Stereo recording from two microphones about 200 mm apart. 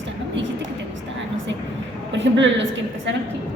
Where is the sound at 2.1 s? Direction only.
65° right (ahead or behind).